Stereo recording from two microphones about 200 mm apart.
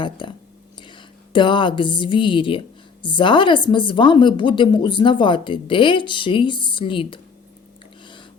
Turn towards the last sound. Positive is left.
turn(degrees=25)  # may be behind; listen again after turning